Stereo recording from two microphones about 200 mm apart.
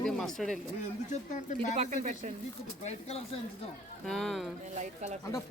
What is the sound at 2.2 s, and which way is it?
Speech, 35° right (ahead or behind).